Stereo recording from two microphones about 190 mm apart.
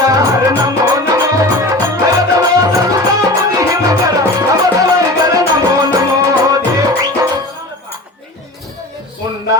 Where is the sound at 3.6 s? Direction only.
15° right (ahead or behind).